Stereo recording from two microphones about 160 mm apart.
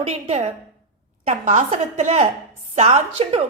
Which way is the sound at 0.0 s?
40° right (ahead or behind).